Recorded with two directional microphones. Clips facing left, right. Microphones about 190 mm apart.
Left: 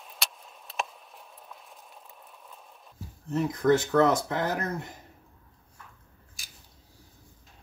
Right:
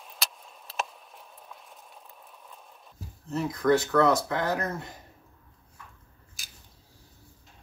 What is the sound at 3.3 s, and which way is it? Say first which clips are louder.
Speech: left 1 dB; 25° left (ahead or behind).